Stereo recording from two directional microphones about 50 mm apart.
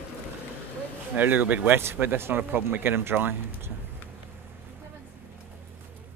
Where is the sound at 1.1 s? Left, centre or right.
Right.